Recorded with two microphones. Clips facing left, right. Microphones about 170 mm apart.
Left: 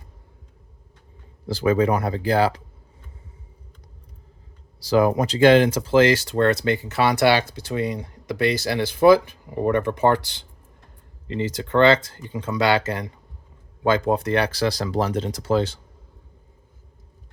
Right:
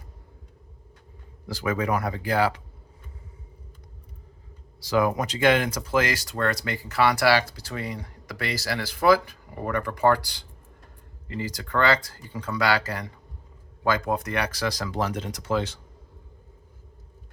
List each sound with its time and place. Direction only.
1.5 s speech: 30° left (ahead or behind)
4.8 s speech: 30° left (ahead or behind)